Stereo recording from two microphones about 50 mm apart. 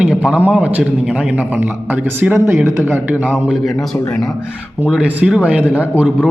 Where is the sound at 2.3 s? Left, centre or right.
Right.